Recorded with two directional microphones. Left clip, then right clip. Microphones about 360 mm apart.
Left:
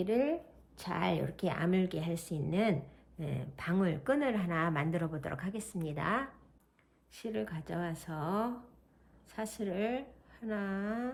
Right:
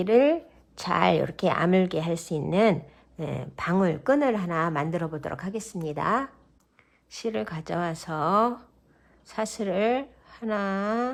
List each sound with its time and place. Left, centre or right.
0.0 s speech: centre